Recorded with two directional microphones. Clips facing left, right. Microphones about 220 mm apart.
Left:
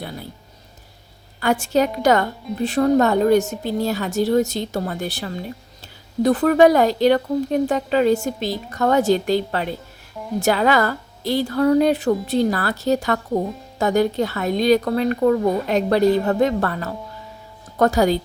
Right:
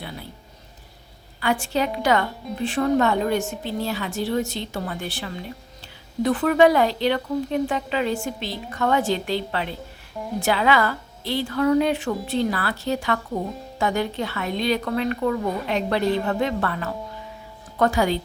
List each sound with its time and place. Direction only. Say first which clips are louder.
0.0 s music: left 4 dB; 40° left (ahead or behind)
1.4 s a woman's voice: left 5 dB; 45° left (ahead or behind)